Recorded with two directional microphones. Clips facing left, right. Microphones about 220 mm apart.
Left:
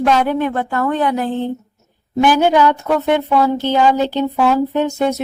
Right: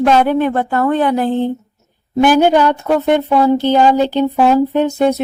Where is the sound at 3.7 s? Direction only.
35° right (ahead or behind).